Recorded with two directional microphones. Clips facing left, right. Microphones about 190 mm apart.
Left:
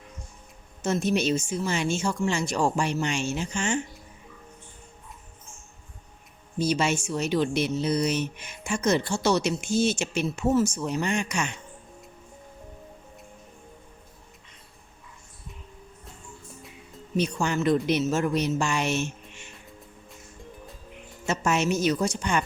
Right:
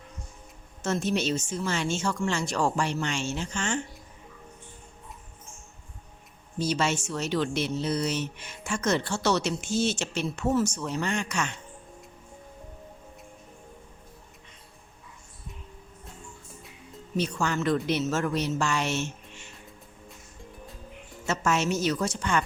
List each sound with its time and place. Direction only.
0.8 s speech: 10° left (ahead or behind)
6.6 s speech: 15° left (ahead or behind)
17.2 s speech: 15° left (ahead or behind)
21.2 s speech: 15° left (ahead or behind)